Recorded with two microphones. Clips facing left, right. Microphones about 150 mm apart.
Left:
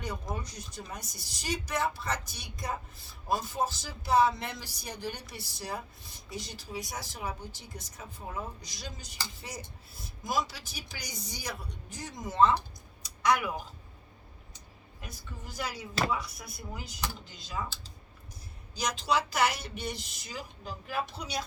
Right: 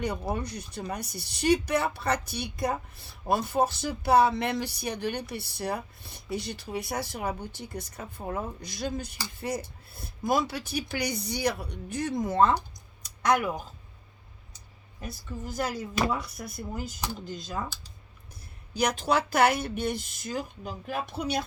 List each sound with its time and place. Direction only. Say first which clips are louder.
0.0 s speech: right 7 dB; 65° right (ahead or behind)
13.0 s a sound: right 3 dB; 50° right (ahead or behind)
15.4 s speech: right 6 dB; 50° right (ahead or behind)
18.7 s speech: right 4 dB; 60° right (ahead or behind)